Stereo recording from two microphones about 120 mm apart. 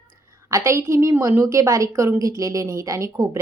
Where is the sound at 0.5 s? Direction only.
25° right (ahead or behind).